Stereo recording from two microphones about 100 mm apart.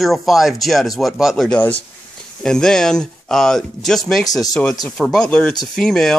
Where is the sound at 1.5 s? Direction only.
15° left (ahead or behind).